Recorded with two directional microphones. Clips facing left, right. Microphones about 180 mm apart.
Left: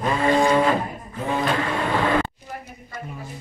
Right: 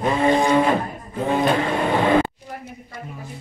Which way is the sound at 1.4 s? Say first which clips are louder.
Right 3 dB; 20° right (ahead or behind).